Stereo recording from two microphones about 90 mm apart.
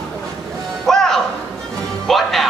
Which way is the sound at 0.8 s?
5° left (ahead or behind).